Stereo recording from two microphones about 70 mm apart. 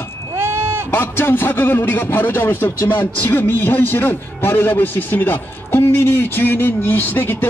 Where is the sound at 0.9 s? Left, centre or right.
Left.